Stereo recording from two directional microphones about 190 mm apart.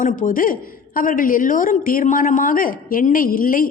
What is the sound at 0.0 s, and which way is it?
A woman's voice, 45° left (ahead or behind).